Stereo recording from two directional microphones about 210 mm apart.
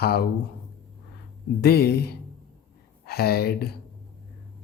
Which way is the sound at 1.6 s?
50° left (ahead or behind).